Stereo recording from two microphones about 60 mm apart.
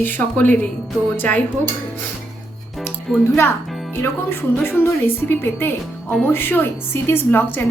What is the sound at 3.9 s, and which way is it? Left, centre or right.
A woman's voice, left.